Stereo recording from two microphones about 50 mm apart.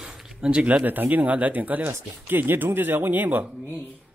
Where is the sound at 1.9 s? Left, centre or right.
Right.